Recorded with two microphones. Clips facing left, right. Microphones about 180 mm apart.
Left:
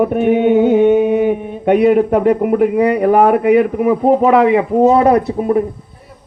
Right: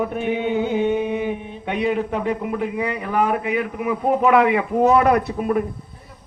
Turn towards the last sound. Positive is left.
turn(degrees=30)  # may be behind; listen again after turning